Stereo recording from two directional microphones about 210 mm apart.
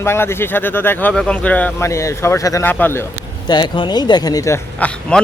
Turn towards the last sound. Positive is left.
turn(degrees=10)  # may be behind; listen again after turning